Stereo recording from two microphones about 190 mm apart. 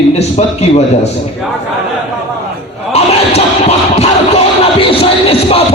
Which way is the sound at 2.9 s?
35° left (ahead or behind).